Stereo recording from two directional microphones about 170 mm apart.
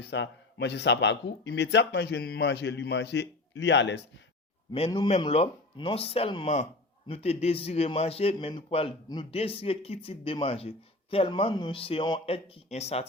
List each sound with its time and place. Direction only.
0.0 s a man's voice: 90° left
4.9 s a man's voice: 35° left (ahead or behind)